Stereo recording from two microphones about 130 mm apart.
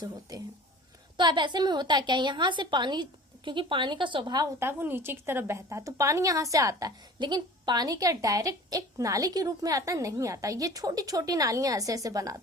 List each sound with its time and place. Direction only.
0.3 s a woman's voice: 30° right (ahead or behind)
4.6 s a woman's voice: 15° right (ahead or behind)